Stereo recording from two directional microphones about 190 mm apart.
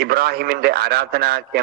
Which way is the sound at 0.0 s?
55° right (ahead or behind).